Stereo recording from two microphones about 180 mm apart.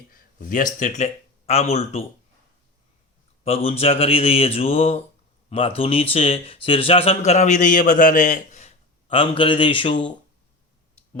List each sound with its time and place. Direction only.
0.1 s speech: 50° left (ahead or behind); by 2.0 s 35° left (ahead or behind)
3.4 s a man's voice: 35° left (ahead or behind)